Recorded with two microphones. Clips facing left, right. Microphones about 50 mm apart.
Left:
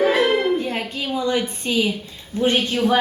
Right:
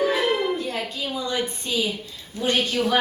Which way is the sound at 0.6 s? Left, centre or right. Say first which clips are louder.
Left 3 dB; left.